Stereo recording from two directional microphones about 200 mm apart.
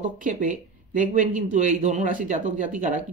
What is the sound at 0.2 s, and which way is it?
Speech, 40° right (ahead or behind).